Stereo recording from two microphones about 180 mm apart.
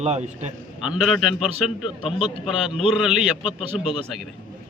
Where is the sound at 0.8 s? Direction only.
Centre (ahead or behind).